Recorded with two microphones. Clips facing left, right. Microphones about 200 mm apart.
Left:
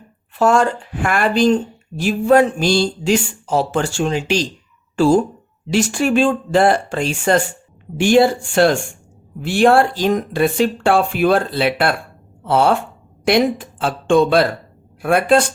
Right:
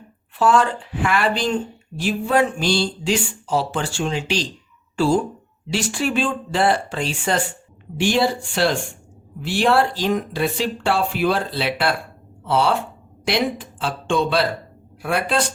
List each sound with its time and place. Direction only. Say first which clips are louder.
0.3 s speech: left 3 dB; 45° left (ahead or behind)